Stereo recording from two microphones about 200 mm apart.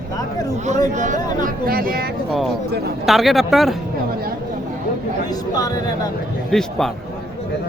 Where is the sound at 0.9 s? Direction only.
40° right (ahead or behind).